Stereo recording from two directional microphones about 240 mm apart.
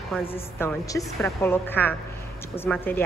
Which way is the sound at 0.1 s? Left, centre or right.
Centre.